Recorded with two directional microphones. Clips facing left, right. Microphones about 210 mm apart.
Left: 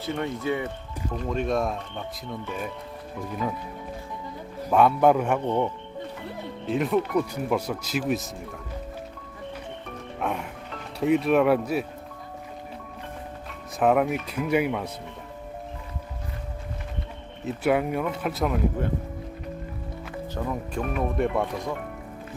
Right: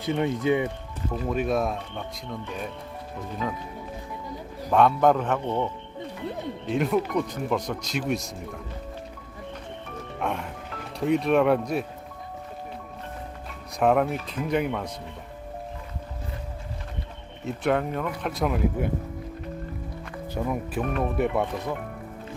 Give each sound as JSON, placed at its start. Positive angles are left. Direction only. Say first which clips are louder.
{"t": 0.0, "sound": "speech", "louder": "right 4 dB", "side_deg": -15}
{"t": 4.7, "sound": "speech", "louder": "left 1 dB", "side_deg": 5}
{"t": 6.7, "sound": "speech", "louder": "left 1 dB", "side_deg": 0}
{"t": 10.2, "sound": "speech", "louder": "even", "side_deg": 5}
{"t": 13.7, "sound": "speech", "louder": "even", "side_deg": 5}
{"t": 17.4, "sound": "speech", "louder": "left 1 dB", "side_deg": 5}
{"t": 20.3, "sound": "speech", "louder": "right 3 dB", "side_deg": -10}